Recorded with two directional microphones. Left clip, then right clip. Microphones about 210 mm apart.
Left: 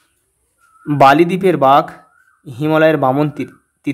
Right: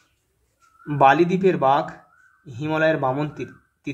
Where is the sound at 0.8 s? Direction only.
40° left (ahead or behind).